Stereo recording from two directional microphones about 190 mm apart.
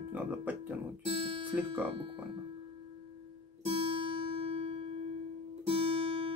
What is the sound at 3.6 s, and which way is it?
Music, 30° right (ahead or behind).